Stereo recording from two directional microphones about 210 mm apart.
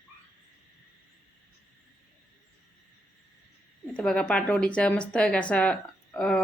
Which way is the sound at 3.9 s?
5° left (ahead or behind).